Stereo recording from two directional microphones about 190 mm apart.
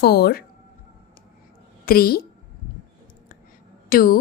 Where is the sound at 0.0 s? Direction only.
55° left (ahead or behind).